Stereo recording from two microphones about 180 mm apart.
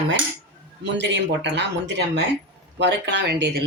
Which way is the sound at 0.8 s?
80° right.